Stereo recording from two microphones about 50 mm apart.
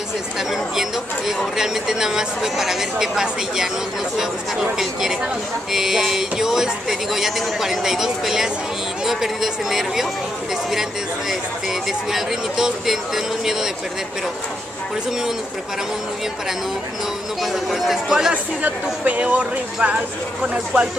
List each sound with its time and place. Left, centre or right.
0.4 s speech: centre
5.7 s speech: centre
17.4 s speech: centre
18.3 s speech: right